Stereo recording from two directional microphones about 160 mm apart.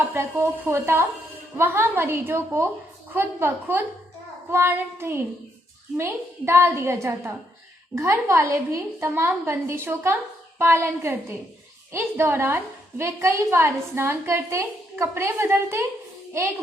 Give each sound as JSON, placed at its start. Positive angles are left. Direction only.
{"t": 0.1, "sound": "a woman's voice", "side_deg": -15}